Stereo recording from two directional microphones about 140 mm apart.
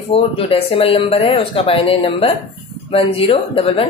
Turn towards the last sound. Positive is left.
turn(degrees=40)  # may be behind; listen again after turning